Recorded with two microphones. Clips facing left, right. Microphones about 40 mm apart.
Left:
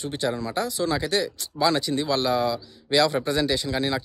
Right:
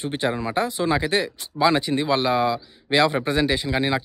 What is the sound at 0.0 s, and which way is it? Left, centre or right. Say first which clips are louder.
Speech: right 3 dB; right.